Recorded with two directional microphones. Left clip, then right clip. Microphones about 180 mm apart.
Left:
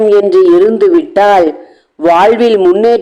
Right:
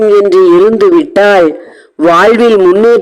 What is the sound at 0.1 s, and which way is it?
A man's voice, 35° right (ahead or behind).